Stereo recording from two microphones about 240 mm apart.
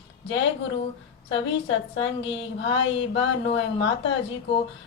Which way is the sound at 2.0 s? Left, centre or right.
Left.